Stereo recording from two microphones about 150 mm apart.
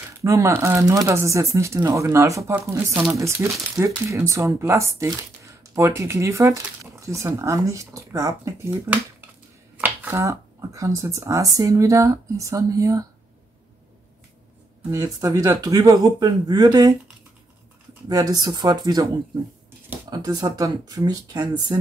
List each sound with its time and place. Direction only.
0.2 s speech: 20° right (ahead or behind)
15.1 s speech: 25° right (ahead or behind)
18.0 s speech: 25° right (ahead or behind)
20.1 s speech: 25° right (ahead or behind)